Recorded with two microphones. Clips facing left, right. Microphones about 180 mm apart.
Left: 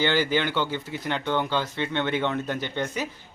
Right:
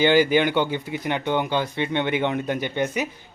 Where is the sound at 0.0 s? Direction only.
15° right (ahead or behind).